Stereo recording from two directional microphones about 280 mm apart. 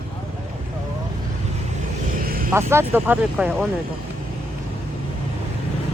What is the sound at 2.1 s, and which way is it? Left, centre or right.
Vehicle, right.